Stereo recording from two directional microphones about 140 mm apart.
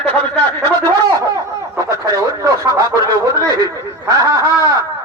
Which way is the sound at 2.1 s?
25° right (ahead or behind).